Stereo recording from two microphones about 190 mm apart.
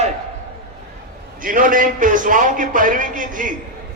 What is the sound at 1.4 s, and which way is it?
A man's voice, 45° right (ahead or behind).